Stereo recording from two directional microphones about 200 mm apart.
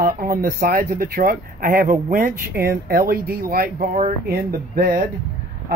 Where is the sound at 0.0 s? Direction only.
45° right (ahead or behind).